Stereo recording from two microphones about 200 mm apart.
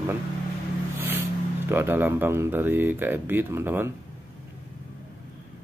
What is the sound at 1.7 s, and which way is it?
Speech, 10° right (ahead or behind).